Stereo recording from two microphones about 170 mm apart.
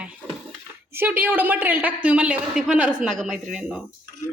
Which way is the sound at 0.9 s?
15° right (ahead or behind).